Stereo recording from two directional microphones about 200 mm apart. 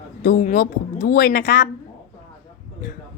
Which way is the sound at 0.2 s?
45° left (ahead or behind).